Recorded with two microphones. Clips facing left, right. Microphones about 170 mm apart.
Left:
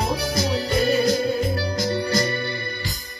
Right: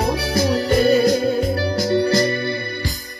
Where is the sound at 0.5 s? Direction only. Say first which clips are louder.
Right 6 dB; 35° right (ahead or behind).